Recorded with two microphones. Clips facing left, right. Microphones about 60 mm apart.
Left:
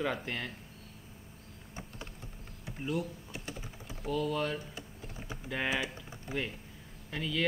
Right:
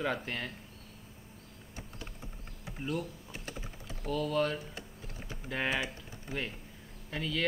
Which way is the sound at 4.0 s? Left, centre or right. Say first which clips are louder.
Right 1 dB; centre.